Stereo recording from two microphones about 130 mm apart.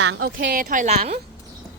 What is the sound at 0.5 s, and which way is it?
Speech, 90° right.